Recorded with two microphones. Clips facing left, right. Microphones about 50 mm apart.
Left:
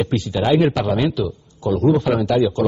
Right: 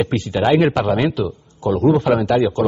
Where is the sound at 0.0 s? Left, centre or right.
Right.